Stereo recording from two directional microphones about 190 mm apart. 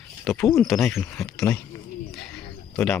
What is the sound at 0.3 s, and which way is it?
Speech, centre (ahead or behind).